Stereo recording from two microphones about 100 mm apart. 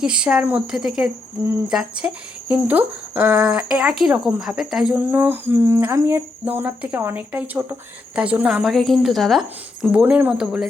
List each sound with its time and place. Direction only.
0.0 s a woman's voice: 10° right (ahead or behind)
5.1 s speech: 20° right (ahead or behind)
8.6 s a woman's voice: centre (ahead or behind)
9.9 s speech: 15° right (ahead or behind)